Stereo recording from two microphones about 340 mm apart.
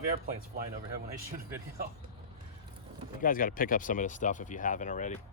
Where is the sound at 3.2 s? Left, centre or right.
Left.